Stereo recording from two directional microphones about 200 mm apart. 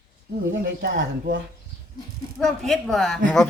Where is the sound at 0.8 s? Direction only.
55° right (ahead or behind).